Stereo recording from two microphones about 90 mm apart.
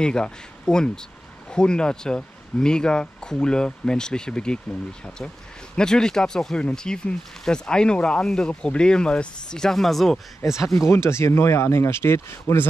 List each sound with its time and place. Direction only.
0.0 s speech: 10° left (ahead or behind)
10.7 s speech: 30° left (ahead or behind)